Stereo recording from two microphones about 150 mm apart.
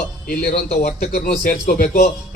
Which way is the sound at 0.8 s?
75° left (ahead or behind).